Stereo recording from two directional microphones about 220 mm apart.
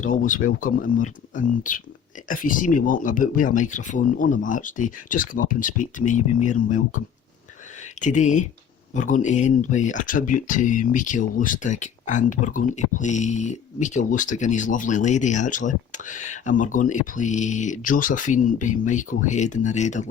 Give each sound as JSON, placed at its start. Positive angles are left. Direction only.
{"t": 0.0, "sound": "speech", "side_deg": 35}
{"t": 8.0, "sound": "speech", "side_deg": 35}